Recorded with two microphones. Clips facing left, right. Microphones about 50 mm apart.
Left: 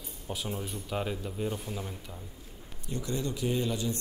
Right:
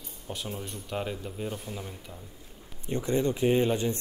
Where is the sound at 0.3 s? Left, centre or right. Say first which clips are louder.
Left 1 dB; centre.